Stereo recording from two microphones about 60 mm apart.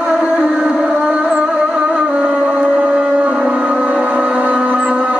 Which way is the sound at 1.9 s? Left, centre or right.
Centre.